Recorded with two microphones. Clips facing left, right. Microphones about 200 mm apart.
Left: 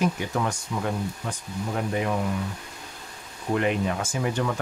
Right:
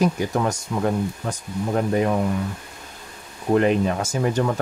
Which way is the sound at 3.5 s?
40° right (ahead or behind).